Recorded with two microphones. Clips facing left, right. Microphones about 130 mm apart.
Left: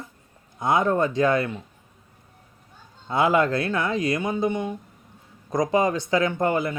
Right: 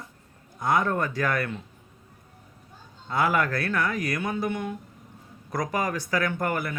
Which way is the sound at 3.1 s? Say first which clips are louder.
Left 4 dB; 25° left (ahead or behind).